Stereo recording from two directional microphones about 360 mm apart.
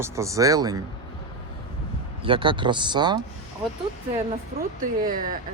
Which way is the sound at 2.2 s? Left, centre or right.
Centre.